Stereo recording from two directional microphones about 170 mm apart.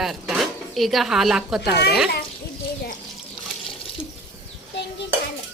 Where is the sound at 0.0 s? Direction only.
Centre (ahead or behind).